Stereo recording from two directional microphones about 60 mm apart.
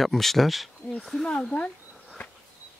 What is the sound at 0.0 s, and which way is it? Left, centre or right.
Speech, centre.